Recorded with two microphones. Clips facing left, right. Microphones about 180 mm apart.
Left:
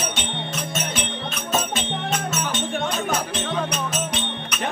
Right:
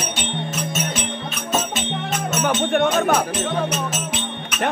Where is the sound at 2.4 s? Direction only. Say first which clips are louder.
Right 7 dB; 60° right (ahead or behind).